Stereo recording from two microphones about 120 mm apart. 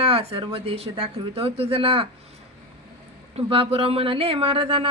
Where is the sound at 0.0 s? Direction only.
55° right (ahead or behind).